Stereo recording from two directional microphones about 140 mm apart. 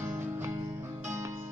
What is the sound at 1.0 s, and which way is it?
Music, 20° right (ahead or behind).